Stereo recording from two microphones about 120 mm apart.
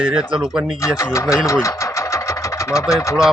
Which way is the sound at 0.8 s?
25° left (ahead or behind).